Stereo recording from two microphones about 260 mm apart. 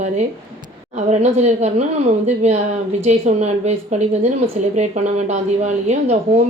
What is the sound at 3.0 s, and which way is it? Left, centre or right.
A woman's voice, right.